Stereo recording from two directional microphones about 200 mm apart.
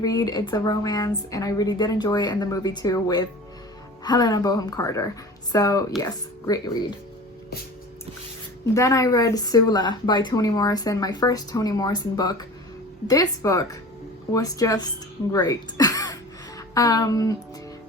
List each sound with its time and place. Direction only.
0.0 s a woman's voice: 20° left (ahead or behind)
8.7 s a woman's voice: 15° left (ahead or behind)